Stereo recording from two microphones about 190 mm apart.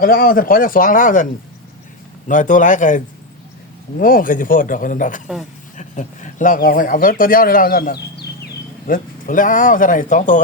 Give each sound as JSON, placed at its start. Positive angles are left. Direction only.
{"t": 0.0, "sound": "speech", "side_deg": 50}
{"t": 4.0, "sound": "speech", "side_deg": 45}